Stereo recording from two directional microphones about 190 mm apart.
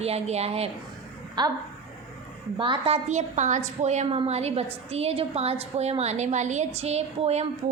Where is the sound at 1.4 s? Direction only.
20° right (ahead or behind).